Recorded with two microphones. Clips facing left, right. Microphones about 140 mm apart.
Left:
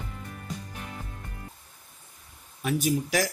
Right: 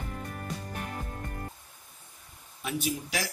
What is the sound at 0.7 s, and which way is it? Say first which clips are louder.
Music: right 3 dB; 50° right (ahead or behind).